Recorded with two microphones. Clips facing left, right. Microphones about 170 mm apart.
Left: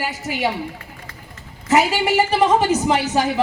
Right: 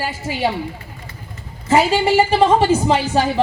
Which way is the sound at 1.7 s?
30° right (ahead or behind).